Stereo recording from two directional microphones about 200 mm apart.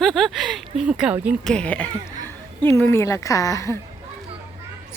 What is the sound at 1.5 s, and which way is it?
A woman's voice, 5° left (ahead or behind).